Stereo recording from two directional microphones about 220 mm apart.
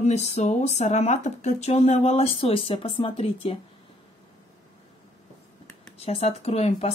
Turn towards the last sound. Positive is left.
turn(degrees=30)  # may be behind; listen again after turning